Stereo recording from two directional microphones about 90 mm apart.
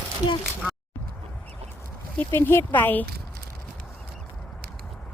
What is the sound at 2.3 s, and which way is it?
Speech, 25° left (ahead or behind).